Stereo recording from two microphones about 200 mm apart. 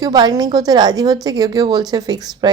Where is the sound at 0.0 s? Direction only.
20° right (ahead or behind).